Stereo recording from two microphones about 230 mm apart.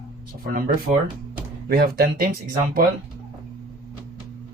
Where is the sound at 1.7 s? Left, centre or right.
Right.